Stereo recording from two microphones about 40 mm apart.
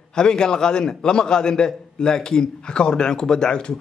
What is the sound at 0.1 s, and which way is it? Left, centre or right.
A man's voice, centre.